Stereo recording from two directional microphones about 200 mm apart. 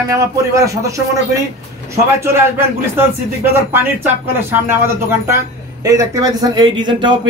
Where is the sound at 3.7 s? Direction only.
10° right (ahead or behind).